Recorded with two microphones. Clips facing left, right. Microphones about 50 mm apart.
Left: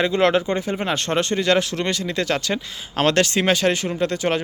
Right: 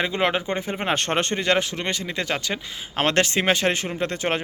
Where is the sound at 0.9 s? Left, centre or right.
Right.